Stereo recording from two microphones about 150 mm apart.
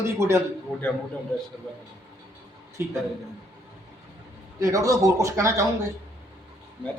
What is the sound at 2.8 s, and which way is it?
Speech, 15° right (ahead or behind).